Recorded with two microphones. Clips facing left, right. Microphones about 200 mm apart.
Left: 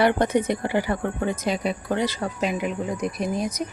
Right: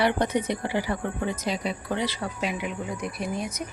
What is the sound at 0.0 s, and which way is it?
Speech, 50° left (ahead or behind).